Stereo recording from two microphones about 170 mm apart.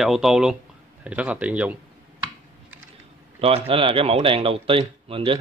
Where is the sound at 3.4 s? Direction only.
35° right (ahead or behind).